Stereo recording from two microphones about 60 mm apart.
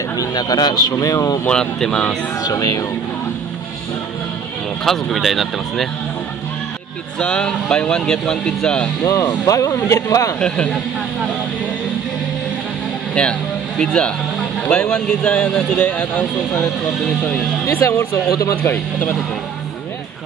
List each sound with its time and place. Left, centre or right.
0.2 s speech: left
1.5 s speech: centre
2.4 s speech: left
4.8 s speech: centre
7.2 s speech: centre
9.0 s speech: left
10.4 s speech: centre
13.1 s speech: centre
17.6 s speech: left
18.3 s speech: left